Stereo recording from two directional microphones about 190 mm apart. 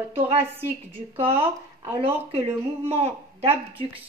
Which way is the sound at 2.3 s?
30° right (ahead or behind).